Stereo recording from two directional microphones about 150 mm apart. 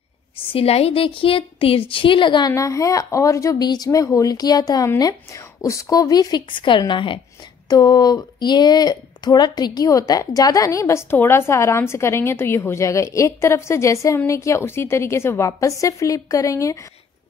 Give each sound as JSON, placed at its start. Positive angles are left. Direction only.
{"t": 0.5, "sound": "a woman's voice", "side_deg": 40}